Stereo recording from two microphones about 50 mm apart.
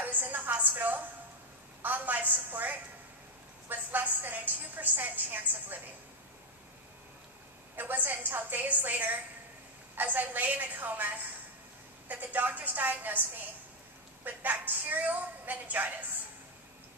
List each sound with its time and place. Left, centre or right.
0.0 s a woman's voice: right
7.7 s a woman's voice: right